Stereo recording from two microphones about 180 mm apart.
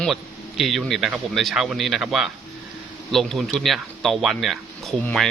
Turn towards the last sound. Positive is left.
turn(degrees=5)  # may be behind; listen again after turning